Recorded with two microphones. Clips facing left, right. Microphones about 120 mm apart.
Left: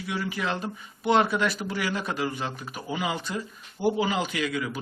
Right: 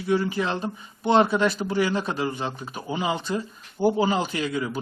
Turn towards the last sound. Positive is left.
turn(degrees=-30)  # may be behind; listen again after turning